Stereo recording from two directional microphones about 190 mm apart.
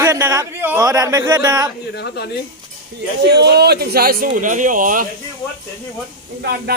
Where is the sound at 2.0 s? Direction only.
60° left (ahead or behind).